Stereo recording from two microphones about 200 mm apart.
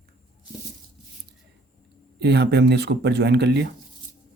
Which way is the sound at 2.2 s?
55° right (ahead or behind).